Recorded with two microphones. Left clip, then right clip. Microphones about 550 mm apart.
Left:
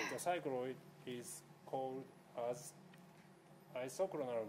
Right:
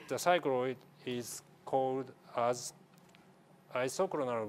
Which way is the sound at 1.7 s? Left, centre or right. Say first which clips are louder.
Right 11 dB; right.